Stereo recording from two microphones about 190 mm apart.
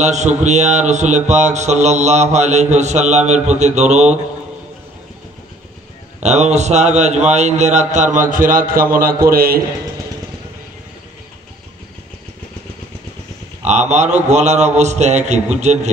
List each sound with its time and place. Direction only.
0.0 s speech: 40° right (ahead or behind)
6.2 s a man's voice: 35° right (ahead or behind)
13.7 s speech: 35° right (ahead or behind)